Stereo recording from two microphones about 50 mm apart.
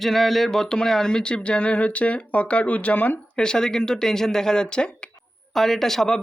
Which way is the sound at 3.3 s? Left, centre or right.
Centre.